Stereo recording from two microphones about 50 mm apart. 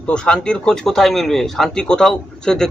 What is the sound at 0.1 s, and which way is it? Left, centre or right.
Speech, centre.